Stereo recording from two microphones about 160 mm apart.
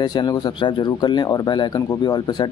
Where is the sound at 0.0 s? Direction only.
25° left (ahead or behind).